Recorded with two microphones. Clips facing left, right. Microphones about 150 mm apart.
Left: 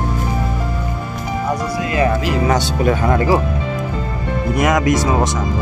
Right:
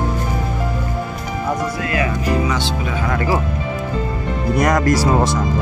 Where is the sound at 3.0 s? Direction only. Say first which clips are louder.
Left 1 dB; 25° left (ahead or behind).